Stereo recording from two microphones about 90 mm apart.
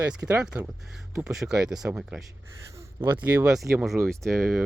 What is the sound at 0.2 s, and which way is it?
Speech, 15° left (ahead or behind).